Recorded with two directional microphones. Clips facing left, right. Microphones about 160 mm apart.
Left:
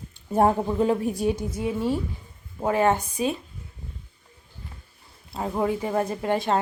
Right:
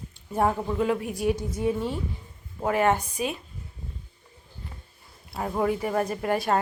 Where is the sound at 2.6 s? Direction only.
25° left (ahead or behind).